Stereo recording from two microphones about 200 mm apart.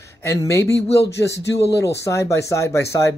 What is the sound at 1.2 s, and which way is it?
Speech, 60° left (ahead or behind).